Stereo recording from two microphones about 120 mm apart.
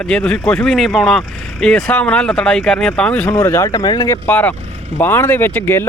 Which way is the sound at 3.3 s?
25° left (ahead or behind).